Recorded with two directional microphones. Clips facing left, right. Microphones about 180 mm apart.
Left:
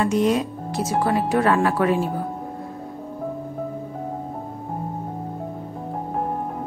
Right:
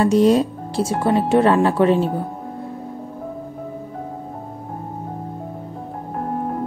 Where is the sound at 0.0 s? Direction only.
35° right (ahead or behind).